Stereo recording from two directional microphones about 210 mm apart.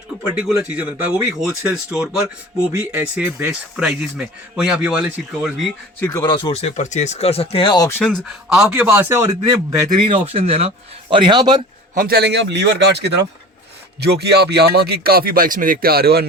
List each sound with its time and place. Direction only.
0.3 s a man's voice: 5° right (ahead or behind)
6.0 s speech: 15° left (ahead or behind); by 10.2 s 15° right (ahead or behind)
10.2 s speech: 25° right (ahead or behind)
11.9 s speech: 45° right (ahead or behind)